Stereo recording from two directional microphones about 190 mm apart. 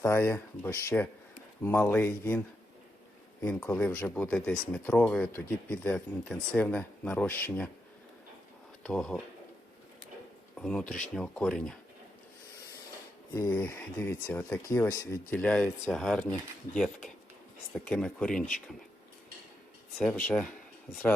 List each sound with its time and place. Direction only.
0.0 s speech: 15° left (ahead or behind)
3.4 s speech: 5° left (ahead or behind)
8.8 s speech: 5° left (ahead or behind)
10.6 s speech: 5° left (ahead or behind)
13.3 s speech: 20° left (ahead or behind)
17.7 s speech: 5° left (ahead or behind)
20.0 s speech: 5° left (ahead or behind)